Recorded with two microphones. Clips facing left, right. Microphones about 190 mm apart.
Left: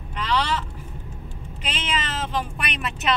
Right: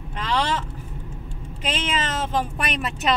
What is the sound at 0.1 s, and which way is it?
Vehicle, 45° right (ahead or behind).